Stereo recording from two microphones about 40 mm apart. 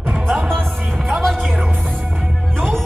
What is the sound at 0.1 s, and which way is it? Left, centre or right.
Music, centre.